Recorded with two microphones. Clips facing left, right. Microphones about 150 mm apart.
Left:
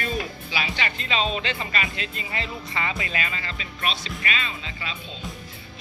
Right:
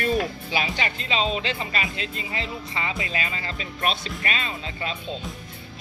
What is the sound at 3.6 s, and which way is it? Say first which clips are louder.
Speech: right 4 dB; 50° right (ahead or behind).